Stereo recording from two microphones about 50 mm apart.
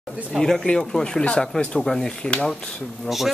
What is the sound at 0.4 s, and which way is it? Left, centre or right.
Speech, centre.